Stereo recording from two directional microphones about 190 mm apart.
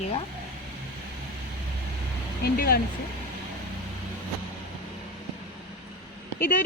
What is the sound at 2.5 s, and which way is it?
Speech, 50° left (ahead or behind).